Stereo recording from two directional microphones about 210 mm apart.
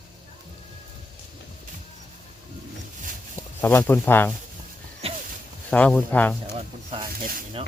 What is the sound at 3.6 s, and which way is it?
Speech, 10° left (ahead or behind).